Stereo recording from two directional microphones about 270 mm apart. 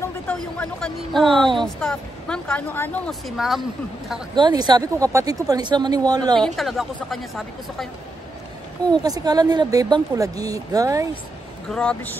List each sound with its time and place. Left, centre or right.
0.3 s a woman's voice: centre
4.4 s speech: centre
6.4 s a woman's voice: centre
8.9 s speech: centre
11.7 s a woman's voice: centre